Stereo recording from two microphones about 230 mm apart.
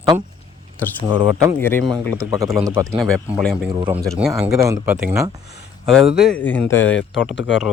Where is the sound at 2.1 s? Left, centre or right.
Centre.